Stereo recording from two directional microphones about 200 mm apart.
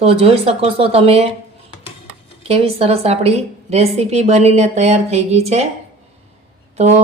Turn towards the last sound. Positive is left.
turn(degrees=-35)  # may be behind; listen again after turning